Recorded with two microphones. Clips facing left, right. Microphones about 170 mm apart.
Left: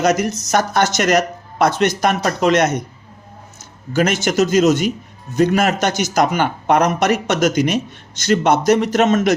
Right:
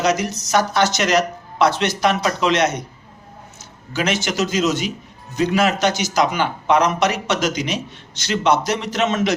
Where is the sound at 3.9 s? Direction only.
45° left (ahead or behind).